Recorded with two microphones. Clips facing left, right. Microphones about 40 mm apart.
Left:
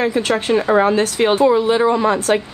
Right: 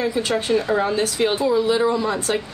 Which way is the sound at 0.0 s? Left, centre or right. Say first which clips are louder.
Left 4 dB; left.